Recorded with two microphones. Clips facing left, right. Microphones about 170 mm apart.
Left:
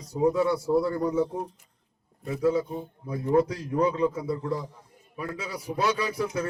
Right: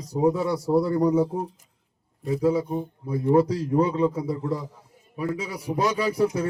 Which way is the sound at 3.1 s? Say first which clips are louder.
Right 3 dB; 35° right (ahead or behind).